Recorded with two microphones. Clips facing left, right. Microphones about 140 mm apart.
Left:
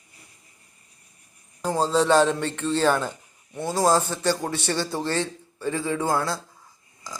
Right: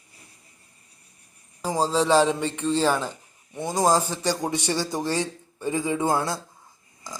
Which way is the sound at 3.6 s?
15° right (ahead or behind).